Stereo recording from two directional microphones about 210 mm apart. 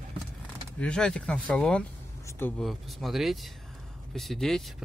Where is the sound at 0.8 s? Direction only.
5° left (ahead or behind).